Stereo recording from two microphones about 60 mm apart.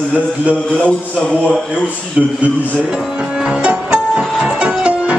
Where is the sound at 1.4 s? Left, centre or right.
Left.